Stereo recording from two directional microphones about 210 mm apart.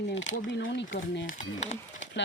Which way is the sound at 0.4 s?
60° left (ahead or behind).